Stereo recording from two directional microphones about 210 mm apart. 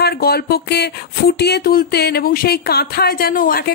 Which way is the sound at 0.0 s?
50° left (ahead or behind).